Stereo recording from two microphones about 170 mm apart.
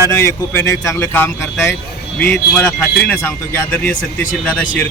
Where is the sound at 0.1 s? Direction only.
15° left (ahead or behind).